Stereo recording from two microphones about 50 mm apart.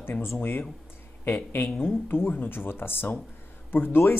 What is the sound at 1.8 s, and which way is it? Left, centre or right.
Speech, left.